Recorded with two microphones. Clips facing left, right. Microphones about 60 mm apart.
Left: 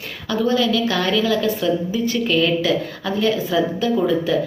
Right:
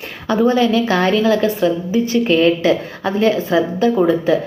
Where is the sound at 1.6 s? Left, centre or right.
Right.